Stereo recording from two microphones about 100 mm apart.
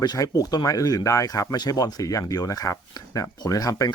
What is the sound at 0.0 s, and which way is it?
Speech, 40° left (ahead or behind).